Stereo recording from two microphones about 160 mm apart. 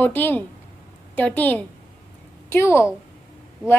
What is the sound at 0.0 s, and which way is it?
A woman's voice, 10° left (ahead or behind).